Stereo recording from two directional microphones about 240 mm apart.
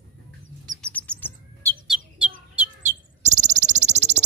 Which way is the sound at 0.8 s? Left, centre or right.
Centre.